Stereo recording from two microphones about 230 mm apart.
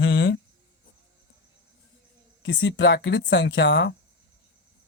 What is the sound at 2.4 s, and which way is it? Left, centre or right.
Speech, left.